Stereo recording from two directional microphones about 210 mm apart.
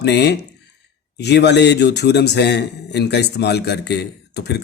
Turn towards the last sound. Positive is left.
turn(degrees=55)  # may be behind; listen again after turning